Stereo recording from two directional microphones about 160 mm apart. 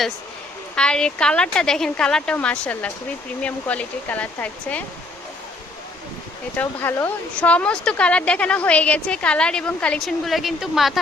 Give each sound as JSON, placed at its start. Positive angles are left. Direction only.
{"t": 0.8, "sound": "a woman's voice", "side_deg": 5}
{"t": 6.6, "sound": "a woman's voice", "side_deg": 10}